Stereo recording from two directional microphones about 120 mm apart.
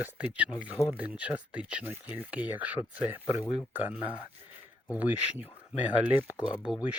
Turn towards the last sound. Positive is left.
turn(degrees=-10)  # may be behind; listen again after turning